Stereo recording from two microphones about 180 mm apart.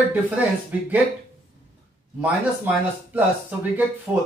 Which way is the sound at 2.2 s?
10° right (ahead or behind).